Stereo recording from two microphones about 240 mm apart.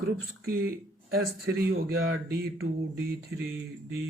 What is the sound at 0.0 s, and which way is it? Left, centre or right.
Speech, right.